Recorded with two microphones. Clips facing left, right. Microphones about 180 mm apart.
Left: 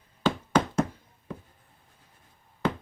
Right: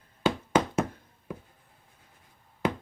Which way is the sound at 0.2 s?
10° right (ahead or behind).